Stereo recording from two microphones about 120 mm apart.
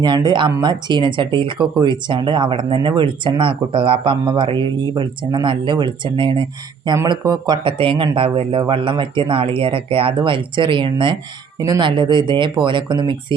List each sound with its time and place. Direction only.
0.0 s speech: 35° right (ahead or behind)
6.9 s speech: 30° right (ahead or behind)